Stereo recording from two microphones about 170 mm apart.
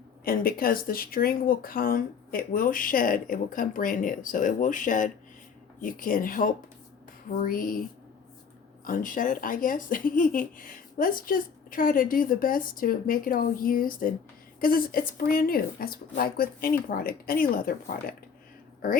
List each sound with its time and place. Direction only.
0.3 s speech: 60° left (ahead or behind)